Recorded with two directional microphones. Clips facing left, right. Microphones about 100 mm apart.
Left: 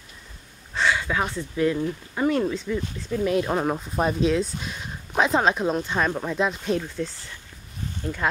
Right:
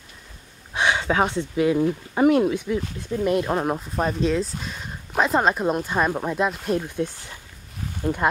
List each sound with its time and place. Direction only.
0.7 s speech: 20° right (ahead or behind)
3.3 s speech: centre (ahead or behind)
7.0 s speech: 15° right (ahead or behind)